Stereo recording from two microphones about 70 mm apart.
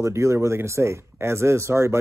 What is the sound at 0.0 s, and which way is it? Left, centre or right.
Speech, right.